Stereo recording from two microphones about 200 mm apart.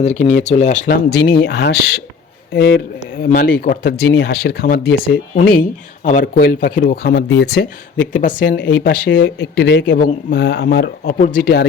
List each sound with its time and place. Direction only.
0.0 s speech: 35° left (ahead or behind)
1.1 s speech: 55° left (ahead or behind)
8.5 s speech: 55° left (ahead or behind)